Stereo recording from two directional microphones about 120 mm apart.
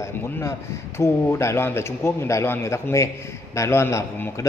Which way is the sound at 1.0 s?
25° left (ahead or behind).